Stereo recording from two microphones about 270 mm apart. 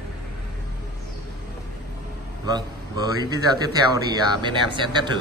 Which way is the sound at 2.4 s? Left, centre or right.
Centre.